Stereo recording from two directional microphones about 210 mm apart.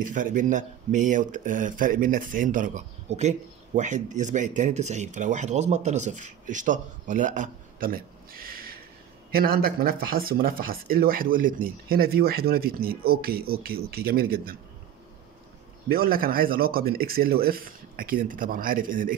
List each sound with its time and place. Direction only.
0.0 s speech: 40° right (ahead or behind)
15.9 s speech: 45° right (ahead or behind)